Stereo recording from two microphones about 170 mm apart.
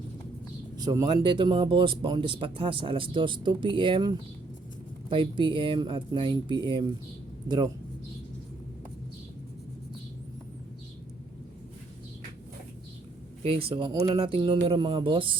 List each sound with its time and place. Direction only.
0.8 s speech: 25° right (ahead or behind)
13.7 s speech: 25° right (ahead or behind)